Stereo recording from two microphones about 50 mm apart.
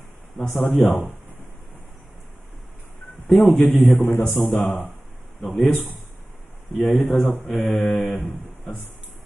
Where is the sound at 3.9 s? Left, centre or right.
Left.